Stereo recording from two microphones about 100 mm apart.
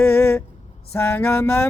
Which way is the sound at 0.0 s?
25° left (ahead or behind).